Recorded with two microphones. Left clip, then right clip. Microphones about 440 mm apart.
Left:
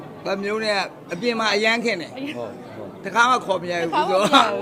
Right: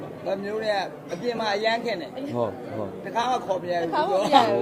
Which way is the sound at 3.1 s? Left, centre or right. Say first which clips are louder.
Left 7 dB; left.